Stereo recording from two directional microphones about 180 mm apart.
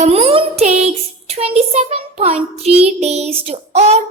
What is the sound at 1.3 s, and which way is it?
A child's voice, 35° right (ahead or behind).